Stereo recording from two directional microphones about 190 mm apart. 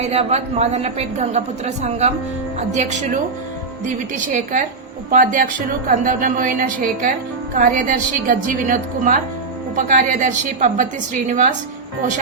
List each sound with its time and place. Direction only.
0.0 s a woman's voice: 35° right (ahead or behind)